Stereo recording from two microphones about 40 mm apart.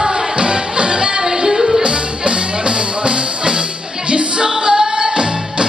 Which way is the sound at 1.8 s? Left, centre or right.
Right.